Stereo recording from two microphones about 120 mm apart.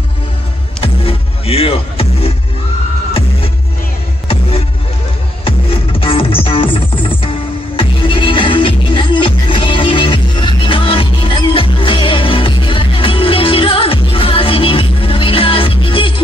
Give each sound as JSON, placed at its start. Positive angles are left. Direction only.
{"t": 0.7, "sound": "music", "side_deg": 50}
{"t": 4.3, "sound": "music", "side_deg": 50}